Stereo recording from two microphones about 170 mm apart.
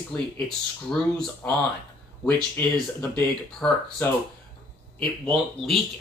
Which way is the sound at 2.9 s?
10° left (ahead or behind).